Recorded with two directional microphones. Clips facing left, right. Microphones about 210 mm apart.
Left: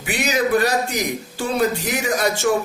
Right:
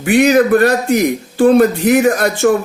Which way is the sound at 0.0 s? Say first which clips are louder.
Right 11 dB; 55° right (ahead or behind).